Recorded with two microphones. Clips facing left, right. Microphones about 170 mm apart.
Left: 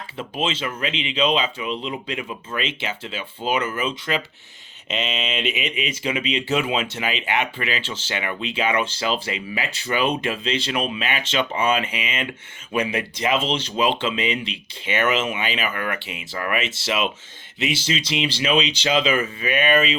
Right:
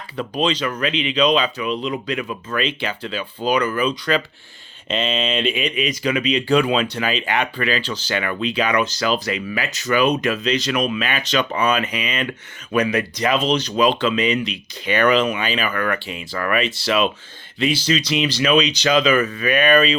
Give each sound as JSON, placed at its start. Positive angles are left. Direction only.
{"t": 0.4, "sound": "speech", "side_deg": 25}
{"t": 5.4, "sound": "a sound", "side_deg": -30}
{"t": 5.6, "sound": "speech", "side_deg": 25}